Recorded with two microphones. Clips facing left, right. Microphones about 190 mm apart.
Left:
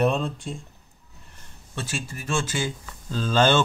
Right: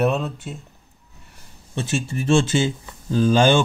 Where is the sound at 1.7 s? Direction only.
25° right (ahead or behind).